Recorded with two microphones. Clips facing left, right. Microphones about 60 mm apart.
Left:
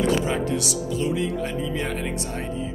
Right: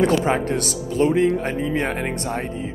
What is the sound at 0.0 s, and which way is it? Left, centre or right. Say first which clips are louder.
Speech: right 4 dB; right.